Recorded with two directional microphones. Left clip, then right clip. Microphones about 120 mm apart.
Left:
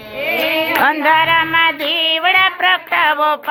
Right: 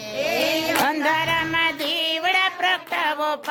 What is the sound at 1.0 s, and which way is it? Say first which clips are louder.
Music: left 9 dB; 20° right (ahead or behind).